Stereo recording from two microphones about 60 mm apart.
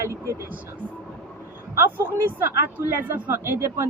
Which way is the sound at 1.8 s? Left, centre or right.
Right.